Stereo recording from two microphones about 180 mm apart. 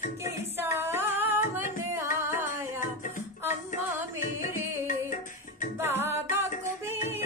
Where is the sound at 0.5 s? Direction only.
15° right (ahead or behind).